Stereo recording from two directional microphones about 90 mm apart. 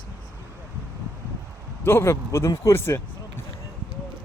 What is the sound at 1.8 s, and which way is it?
Speech, 30° left (ahead or behind).